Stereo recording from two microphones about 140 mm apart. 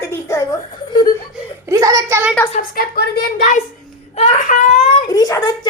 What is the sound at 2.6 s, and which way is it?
Speech, 90° left.